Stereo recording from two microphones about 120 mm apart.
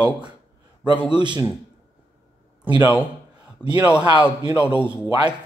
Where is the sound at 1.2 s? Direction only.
40° right (ahead or behind).